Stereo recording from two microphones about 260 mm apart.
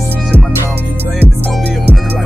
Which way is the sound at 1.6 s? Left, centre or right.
Right.